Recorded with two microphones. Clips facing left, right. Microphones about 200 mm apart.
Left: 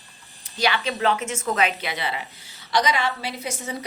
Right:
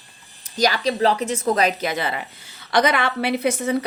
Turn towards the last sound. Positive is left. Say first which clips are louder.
# right 10 dB
turn(degrees=-60)  # may be behind; listen again after turning